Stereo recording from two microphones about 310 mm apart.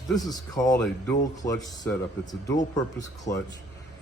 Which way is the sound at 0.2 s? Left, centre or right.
Centre.